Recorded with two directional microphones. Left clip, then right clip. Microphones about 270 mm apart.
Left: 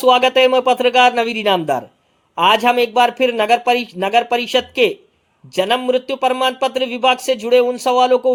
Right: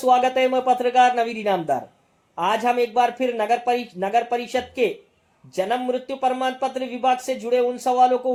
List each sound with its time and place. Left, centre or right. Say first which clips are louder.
0.0 s speech: left 6 dB; left